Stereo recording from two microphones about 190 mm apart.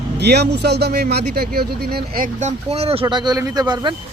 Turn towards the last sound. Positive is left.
turn(degrees=-20)  # may be behind; listen again after turning